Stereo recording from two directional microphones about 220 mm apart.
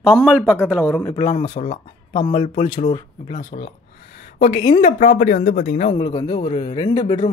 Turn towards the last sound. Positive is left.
turn(degrees=15)  # may be behind; listen again after turning